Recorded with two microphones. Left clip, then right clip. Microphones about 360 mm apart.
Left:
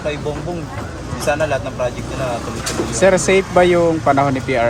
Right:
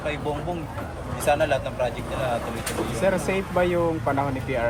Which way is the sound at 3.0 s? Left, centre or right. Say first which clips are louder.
Left 12 dB; left.